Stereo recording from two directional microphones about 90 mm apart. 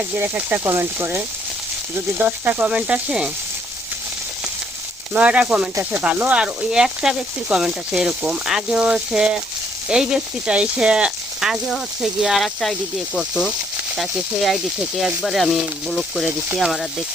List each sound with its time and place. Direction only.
0.2 s speech: 20° right (ahead or behind)
5.1 s speech: 15° right (ahead or behind); by 16.8 s centre (ahead or behind)